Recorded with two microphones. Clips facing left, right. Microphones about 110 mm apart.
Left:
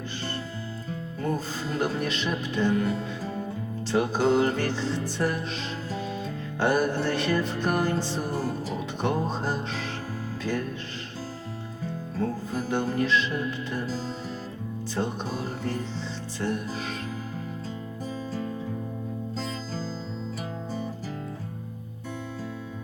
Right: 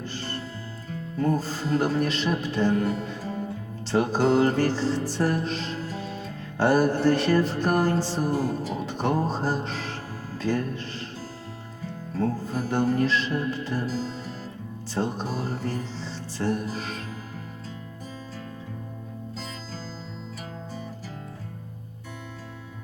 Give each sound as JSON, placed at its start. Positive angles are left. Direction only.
{"t": 1.4, "sound": "speech", "side_deg": 0}
{"t": 4.9, "sound": "music", "side_deg": -40}
{"t": 5.1, "sound": "speech", "side_deg": 0}
{"t": 8.3, "sound": "music", "side_deg": -45}
{"t": 9.0, "sound": "speech", "side_deg": 0}
{"t": 12.5, "sound": "speech", "side_deg": 0}
{"t": 14.9, "sound": "speech", "side_deg": 0}
{"t": 16.4, "sound": "music", "side_deg": 0}